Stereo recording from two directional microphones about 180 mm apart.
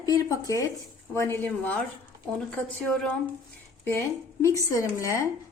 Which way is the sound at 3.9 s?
15° left (ahead or behind).